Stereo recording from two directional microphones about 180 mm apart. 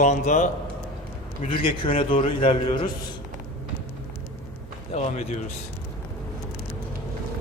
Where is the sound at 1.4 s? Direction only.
30° left (ahead or behind).